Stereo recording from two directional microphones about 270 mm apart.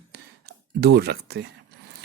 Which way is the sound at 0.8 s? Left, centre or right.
Right.